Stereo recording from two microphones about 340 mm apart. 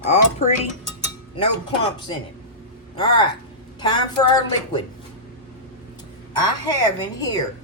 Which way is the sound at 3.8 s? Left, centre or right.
Centre.